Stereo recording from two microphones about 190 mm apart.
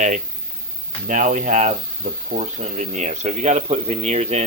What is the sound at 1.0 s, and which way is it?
Speech, 40° right (ahead or behind).